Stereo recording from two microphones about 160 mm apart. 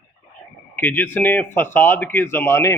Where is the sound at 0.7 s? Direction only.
10° left (ahead or behind).